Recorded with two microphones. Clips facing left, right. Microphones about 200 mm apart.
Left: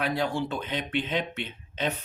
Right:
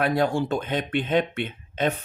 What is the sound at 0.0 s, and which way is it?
Speech, 50° right (ahead or behind).